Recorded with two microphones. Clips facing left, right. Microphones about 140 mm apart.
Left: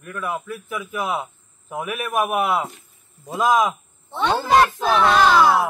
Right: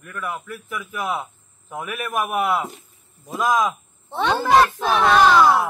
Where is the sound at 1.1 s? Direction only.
5° left (ahead or behind).